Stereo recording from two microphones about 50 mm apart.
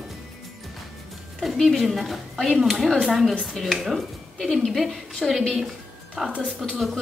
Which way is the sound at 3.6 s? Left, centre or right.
Centre.